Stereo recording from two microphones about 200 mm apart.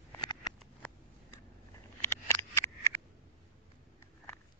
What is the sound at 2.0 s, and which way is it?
Scissors, 10° left (ahead or behind).